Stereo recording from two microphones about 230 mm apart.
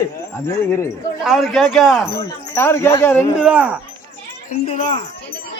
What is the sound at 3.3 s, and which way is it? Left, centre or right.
Speech, centre.